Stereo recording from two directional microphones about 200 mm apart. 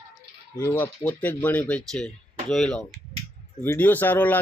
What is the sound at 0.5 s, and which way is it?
A man's voice, 10° left (ahead or behind).